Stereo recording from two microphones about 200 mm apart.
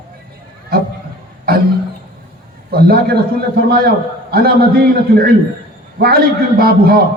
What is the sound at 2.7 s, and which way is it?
Speech, 50° right (ahead or behind).